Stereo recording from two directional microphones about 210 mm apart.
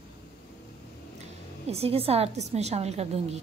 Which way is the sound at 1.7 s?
30° right (ahead or behind).